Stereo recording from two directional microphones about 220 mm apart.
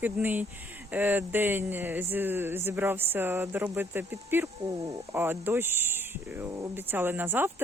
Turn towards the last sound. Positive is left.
turn(degrees=-10)  # may be behind; listen again after turning